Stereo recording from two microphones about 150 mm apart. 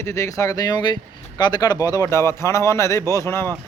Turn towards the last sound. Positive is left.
turn(degrees=15)  # may be behind; listen again after turning